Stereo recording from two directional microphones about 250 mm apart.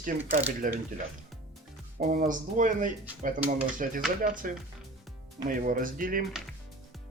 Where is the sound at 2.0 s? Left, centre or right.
Right.